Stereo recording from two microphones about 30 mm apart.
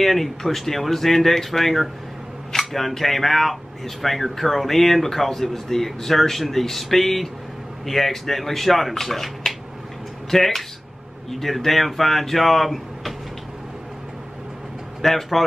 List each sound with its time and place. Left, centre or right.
0.0 s speech: centre
2.5 s a sound: centre
3.0 s speech: centre
15.0 s speech: centre